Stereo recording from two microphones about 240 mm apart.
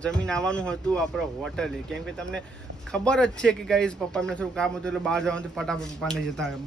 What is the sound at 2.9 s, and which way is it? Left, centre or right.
Speech, centre.